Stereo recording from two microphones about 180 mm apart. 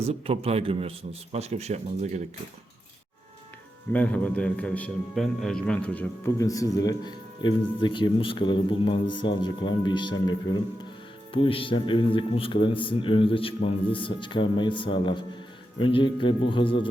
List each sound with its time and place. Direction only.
0.1 s a man's voice: 35° right (ahead or behind)
3.9 s a man's voice: 10° left (ahead or behind); by 16.9 s 30° left (ahead or behind)